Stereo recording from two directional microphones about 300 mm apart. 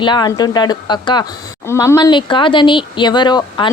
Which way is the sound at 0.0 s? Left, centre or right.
Centre.